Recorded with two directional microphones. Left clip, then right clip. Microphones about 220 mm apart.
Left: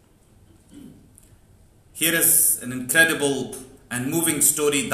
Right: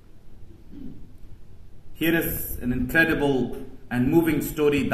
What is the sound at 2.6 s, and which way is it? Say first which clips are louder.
A man's voice: left 2 dB; 45° left (ahead or behind).